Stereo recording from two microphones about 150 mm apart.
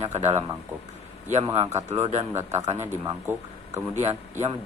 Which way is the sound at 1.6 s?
50° right (ahead or behind).